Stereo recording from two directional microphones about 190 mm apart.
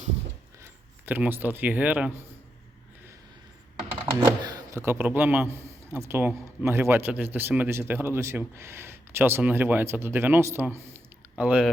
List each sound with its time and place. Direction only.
1.0 s speech: 10° right (ahead or behind)
4.0 s speech: 15° right (ahead or behind)